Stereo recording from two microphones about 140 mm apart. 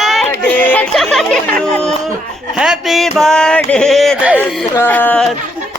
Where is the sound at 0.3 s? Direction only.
10° left (ahead or behind).